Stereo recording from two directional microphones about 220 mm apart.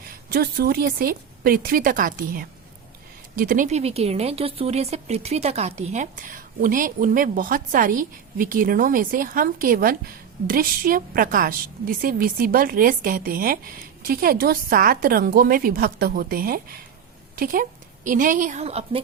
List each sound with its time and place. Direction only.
0.3 s a woman's voice: 45° right (ahead or behind)